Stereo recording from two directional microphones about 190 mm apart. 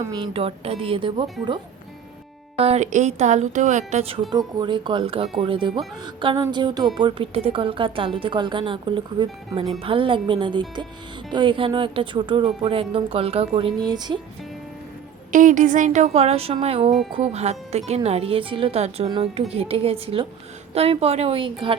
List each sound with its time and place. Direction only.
0.1 s speech: 25° right (ahead or behind)
2.6 s speech: 35° right (ahead or behind)
4.3 s speech: 20° right (ahead or behind)
13.8 s speech: 20° right (ahead or behind)
15.3 s speech: 40° right (ahead or behind)